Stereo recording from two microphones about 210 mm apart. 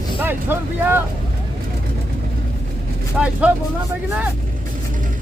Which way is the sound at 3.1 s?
5° right (ahead or behind).